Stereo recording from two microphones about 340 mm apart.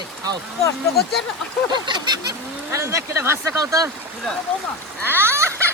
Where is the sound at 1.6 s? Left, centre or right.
Centre.